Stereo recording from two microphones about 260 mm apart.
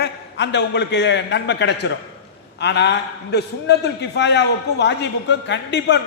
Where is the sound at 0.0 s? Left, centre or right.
Left.